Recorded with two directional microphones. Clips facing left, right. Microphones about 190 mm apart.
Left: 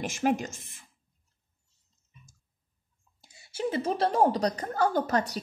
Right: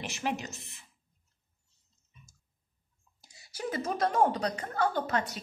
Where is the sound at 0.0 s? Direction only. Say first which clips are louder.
Left 7 dB; 50° left (ahead or behind).